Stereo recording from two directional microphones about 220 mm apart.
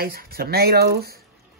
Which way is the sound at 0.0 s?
45° right (ahead or behind).